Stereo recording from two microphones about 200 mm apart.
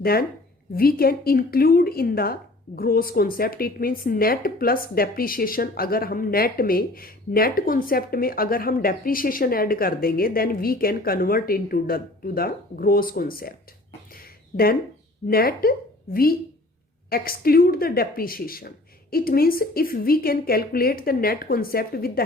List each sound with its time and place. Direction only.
0.0 s speech: 50° left (ahead or behind)
14.1 s a sound: 45° left (ahead or behind)
15.3 s speech: 50° left (ahead or behind)
17.1 s speech: 50° left (ahead or behind)